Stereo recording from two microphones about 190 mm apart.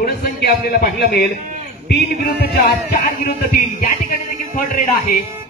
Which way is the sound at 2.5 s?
50° left (ahead or behind).